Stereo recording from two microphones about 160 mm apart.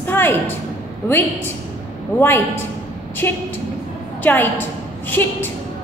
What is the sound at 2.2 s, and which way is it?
A woman's voice, 15° left (ahead or behind).